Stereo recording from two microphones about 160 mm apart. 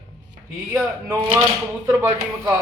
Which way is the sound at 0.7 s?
15° right (ahead or behind).